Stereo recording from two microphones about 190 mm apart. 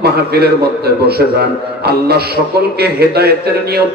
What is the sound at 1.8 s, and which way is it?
A man's voice, 55° right (ahead or behind).